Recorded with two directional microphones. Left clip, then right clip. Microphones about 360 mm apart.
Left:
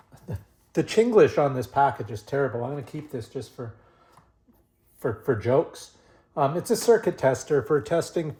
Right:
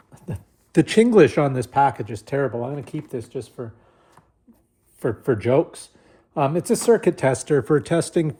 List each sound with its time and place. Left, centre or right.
0.8 s speech: right
4.9 s speech: right